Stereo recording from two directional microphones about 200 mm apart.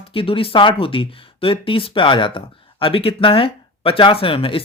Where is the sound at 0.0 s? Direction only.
25° left (ahead or behind).